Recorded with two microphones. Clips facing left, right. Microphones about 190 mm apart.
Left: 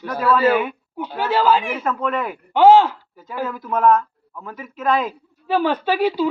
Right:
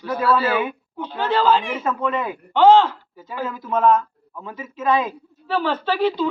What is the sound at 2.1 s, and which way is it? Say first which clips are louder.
Speech: left 1 dB; 20° right (ahead or behind).